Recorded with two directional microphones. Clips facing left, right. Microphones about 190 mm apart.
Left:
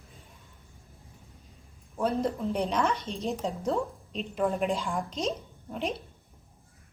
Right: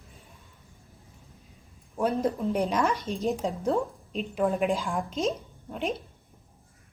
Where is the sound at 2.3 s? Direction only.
5° right (ahead or behind).